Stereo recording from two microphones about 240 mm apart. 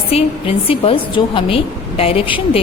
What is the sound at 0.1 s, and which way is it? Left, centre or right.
A woman's voice, left.